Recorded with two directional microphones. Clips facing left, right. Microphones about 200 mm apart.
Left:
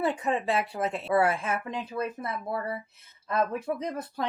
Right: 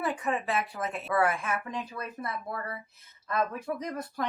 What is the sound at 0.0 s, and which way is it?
Speech, 25° left (ahead or behind).